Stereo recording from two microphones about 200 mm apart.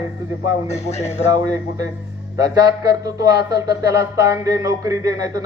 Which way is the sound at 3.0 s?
15° right (ahead or behind).